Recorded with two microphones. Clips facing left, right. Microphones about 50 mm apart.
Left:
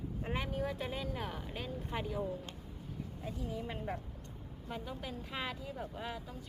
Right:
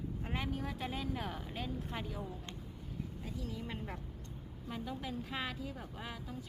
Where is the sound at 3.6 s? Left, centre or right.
Centre.